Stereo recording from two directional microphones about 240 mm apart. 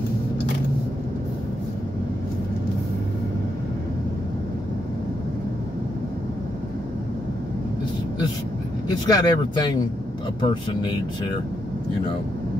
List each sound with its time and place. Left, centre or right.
8.8 s speech: centre